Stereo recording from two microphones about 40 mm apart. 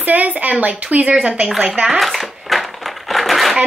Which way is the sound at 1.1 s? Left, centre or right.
Right.